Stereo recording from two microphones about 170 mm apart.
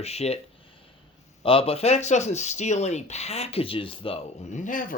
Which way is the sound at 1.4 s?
35° left (ahead or behind).